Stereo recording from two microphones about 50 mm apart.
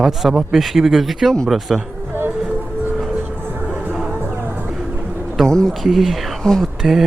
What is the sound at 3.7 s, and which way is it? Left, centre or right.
Music, right.